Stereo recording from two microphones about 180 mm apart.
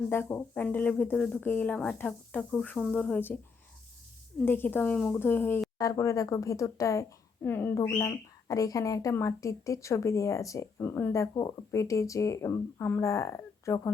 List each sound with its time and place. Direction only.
0.1 s a woman's voice: 10° left (ahead or behind)
4.4 s a woman's voice: 10° left (ahead or behind)